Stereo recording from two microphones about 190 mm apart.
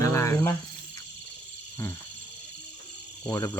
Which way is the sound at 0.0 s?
15° left (ahead or behind).